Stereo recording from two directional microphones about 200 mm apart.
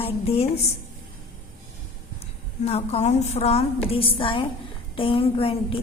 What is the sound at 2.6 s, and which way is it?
A woman's voice, 30° left (ahead or behind).